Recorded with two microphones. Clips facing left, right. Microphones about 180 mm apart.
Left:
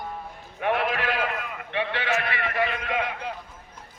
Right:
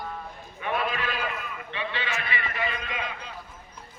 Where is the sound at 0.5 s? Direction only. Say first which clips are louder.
Left 4 dB; 65° left (ahead or behind).